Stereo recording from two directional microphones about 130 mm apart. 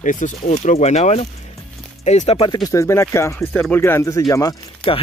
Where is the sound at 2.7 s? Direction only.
20° left (ahead or behind).